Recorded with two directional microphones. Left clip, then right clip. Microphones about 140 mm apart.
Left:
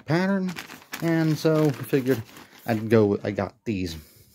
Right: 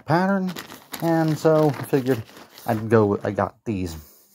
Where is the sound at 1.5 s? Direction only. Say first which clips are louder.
Right 5 dB; 15° left (ahead or behind).